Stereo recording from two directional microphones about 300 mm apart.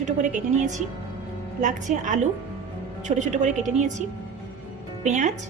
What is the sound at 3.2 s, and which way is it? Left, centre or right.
Speech, right.